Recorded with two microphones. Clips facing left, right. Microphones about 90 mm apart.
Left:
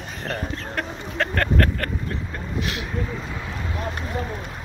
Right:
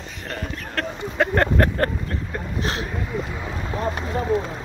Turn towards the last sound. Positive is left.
turn(degrees=-20)  # may be behind; listen again after turning